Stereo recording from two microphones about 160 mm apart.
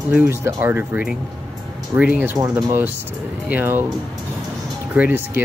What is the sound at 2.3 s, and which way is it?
Speech, 20° right (ahead or behind).